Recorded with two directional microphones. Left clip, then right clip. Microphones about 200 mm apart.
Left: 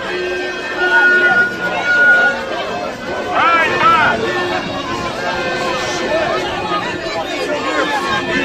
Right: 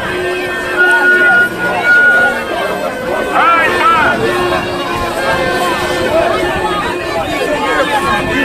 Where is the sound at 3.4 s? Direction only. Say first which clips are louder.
Right 2 dB; 50° left (ahead or behind).